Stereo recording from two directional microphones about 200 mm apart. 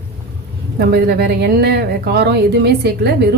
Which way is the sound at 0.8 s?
55° right (ahead or behind).